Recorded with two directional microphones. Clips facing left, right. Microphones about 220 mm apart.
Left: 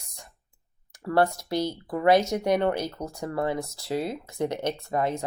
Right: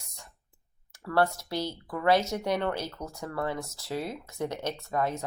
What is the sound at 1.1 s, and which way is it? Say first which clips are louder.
Speech: left 3 dB; 15° left (ahead or behind).